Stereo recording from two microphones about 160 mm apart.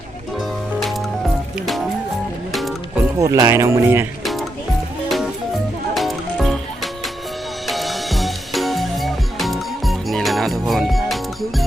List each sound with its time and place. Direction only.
1.5 s music: centre (ahead or behind)
3.2 s speech: 20° right (ahead or behind)
4.2 s music: centre (ahead or behind)
7.7 s music: centre (ahead or behind)